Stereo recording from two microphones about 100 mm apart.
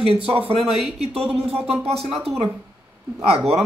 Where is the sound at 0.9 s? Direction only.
90° right.